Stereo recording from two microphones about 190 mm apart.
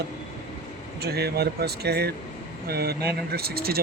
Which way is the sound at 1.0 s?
55° right (ahead or behind).